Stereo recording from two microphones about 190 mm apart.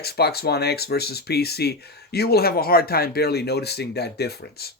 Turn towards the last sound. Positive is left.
turn(degrees=55)  # may be behind; listen again after turning